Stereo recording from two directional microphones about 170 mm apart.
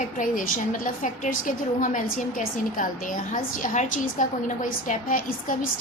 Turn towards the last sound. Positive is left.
turn(degrees=55)  # may be behind; listen again after turning